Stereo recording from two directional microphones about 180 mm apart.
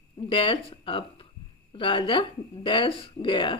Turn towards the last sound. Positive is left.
turn(degrees=30)  # may be behind; listen again after turning